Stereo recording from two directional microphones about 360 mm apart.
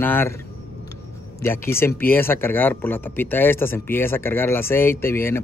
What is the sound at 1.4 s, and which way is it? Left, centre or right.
Speech, centre.